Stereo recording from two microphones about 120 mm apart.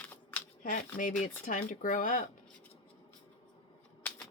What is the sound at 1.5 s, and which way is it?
Speech, 90° left.